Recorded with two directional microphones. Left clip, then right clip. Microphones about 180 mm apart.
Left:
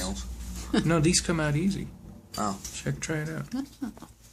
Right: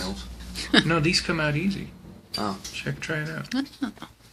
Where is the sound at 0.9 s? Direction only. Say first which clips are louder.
Right 2 dB; 60° left (ahead or behind).